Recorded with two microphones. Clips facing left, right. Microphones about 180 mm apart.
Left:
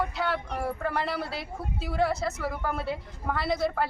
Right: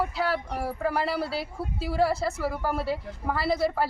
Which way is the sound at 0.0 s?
5° right (ahead or behind).